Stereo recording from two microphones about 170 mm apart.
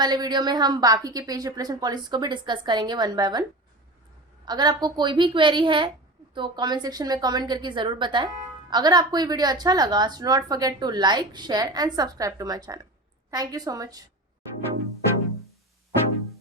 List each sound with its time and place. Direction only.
0.0 s a woman's voice: 25° right (ahead or behind)
4.4 s a woman's voice: 25° right (ahead or behind)